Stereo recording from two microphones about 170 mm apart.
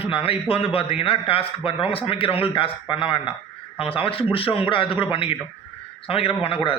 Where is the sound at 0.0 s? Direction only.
35° left (ahead or behind).